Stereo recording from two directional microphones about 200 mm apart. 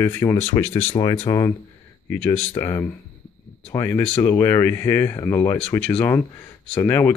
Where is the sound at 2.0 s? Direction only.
10° left (ahead or behind).